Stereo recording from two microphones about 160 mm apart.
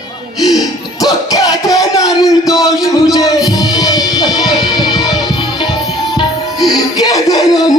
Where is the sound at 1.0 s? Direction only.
25° left (ahead or behind).